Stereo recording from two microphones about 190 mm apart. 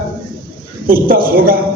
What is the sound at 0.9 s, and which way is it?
Speech, 50° right (ahead or behind).